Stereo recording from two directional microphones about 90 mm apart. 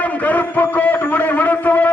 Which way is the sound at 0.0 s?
15° left (ahead or behind).